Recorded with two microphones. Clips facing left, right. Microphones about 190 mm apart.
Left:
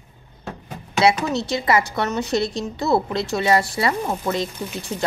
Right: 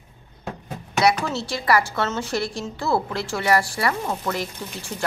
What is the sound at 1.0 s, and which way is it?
Speech, 20° left (ahead or behind).